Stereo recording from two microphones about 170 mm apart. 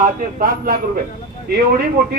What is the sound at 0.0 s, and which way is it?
Speech, 55° right (ahead or behind).